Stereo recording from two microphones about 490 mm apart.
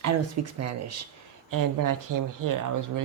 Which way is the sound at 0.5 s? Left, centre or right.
Right.